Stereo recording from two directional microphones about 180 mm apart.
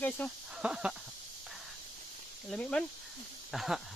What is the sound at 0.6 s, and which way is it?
Speech, 5° right (ahead or behind).